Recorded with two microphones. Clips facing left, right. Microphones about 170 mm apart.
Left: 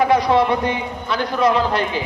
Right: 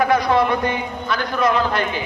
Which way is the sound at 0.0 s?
25° left (ahead or behind).